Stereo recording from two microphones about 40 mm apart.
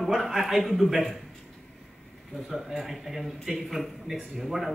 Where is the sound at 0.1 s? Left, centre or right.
Centre.